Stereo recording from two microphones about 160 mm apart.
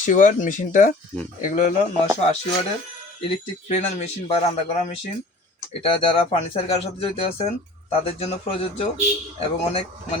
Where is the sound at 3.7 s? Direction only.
45° left (ahead or behind).